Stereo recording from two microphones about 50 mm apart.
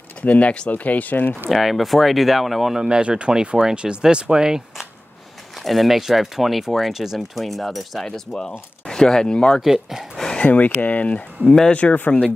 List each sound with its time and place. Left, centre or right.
0.2 s speech: left
1.5 s speech: centre
3.0 s speech: right
5.6 s speech: centre
8.4 s speech: centre
9.6 s speech: centre
10.3 s a sound: left
10.8 s speech: left
11.4 s speech: centre
11.7 s speech: left